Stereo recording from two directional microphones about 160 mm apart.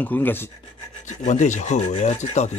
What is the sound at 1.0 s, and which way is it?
Rub, 50° left (ahead or behind).